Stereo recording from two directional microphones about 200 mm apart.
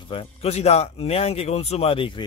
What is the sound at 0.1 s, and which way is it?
Speech, 30° left (ahead or behind).